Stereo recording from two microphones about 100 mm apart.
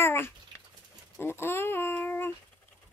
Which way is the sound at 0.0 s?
25° left (ahead or behind).